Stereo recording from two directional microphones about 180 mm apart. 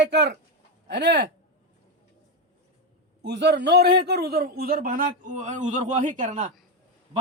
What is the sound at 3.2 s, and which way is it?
A man's voice, 75° right (ahead or behind).